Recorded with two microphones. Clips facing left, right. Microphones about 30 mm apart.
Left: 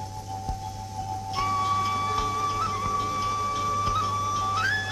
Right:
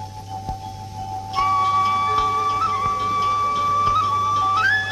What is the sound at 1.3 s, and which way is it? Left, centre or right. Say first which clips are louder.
Music: right 7 dB; right.